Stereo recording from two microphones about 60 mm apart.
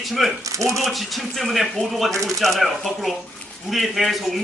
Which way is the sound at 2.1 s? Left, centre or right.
Right.